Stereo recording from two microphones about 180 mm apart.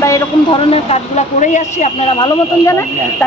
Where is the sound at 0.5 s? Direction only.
30° left (ahead or behind).